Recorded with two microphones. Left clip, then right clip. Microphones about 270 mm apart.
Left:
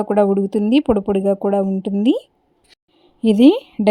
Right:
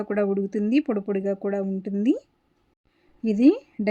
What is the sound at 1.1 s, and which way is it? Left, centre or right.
Speech, left.